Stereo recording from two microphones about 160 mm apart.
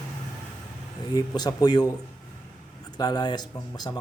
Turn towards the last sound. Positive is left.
turn(degrees=25)  # may be behind; listen again after turning